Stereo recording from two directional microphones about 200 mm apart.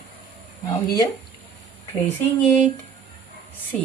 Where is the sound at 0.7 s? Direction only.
20° left (ahead or behind).